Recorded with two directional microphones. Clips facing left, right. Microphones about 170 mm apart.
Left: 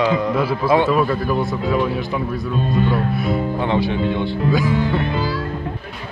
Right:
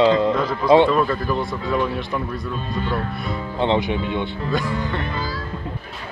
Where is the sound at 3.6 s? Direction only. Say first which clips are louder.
Left 1 dB; 20° right (ahead or behind).